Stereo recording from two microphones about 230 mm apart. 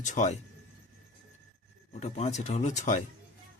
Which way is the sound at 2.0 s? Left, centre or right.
Left.